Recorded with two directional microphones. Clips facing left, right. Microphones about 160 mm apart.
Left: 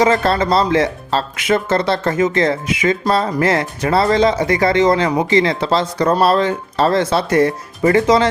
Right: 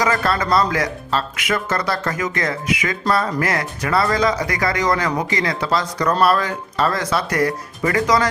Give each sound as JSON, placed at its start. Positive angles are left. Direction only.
{"t": 0.0, "sound": "speech", "side_deg": 25}